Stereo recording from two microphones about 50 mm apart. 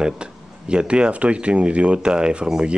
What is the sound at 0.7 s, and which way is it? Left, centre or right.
Speech, centre.